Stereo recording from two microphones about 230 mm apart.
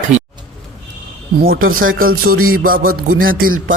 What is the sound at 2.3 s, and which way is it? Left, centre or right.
Music, right.